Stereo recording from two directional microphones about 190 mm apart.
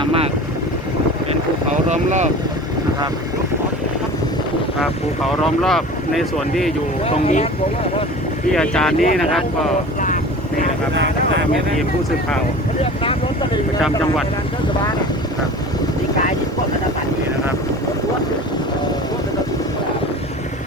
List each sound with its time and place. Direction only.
0.0 s vehicle: 30° right (ahead or behind)
1.7 s speech: 40° right (ahead or behind)
4.8 s speech: centre (ahead or behind)
7.0 s speech: 35° left (ahead or behind)
8.5 s speech: 5° left (ahead or behind)
12.8 s speech: 30° left (ahead or behind)